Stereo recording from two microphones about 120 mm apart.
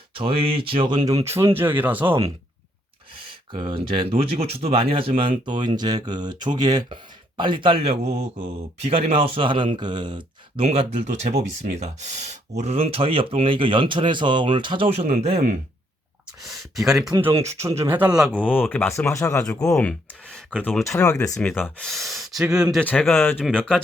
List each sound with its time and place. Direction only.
0.1 s speech: 50° right (ahead or behind); by 2.1 s 15° right (ahead or behind)
3.5 s speech: 45° right (ahead or behind)
5.5 s speech: 40° right (ahead or behind)
10.6 s speech: 60° right (ahead or behind)
16.4 s speech: centre (ahead or behind)
17.2 s speech: 20° right (ahead or behind)
18.3 s speech: 15° left (ahead or behind); by 19.7 s 30° left (ahead or behind)
19.7 s speech: 10° left (ahead or behind)
20.8 s speech: 25° left (ahead or behind)
21.8 s speech: centre (ahead or behind)
22.8 s speech: 10° left (ahead or behind)
23.5 s speech: 5° left (ahead or behind)